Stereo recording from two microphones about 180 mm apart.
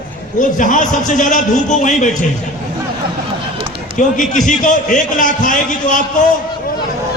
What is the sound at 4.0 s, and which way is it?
A man's voice, 45° left (ahead or behind).